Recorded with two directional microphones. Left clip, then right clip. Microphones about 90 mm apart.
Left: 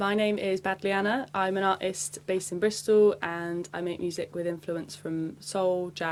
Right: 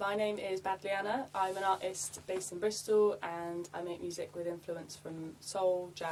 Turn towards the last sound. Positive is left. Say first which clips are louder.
# left 5 dB
turn(degrees=35)  # may be behind; listen again after turning